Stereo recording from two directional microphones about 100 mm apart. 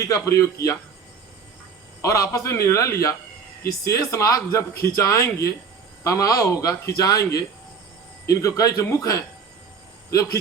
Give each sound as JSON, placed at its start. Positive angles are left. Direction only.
{"t": 0.0, "sound": "a man's voice", "side_deg": 30}
{"t": 2.0, "sound": "speech", "side_deg": 30}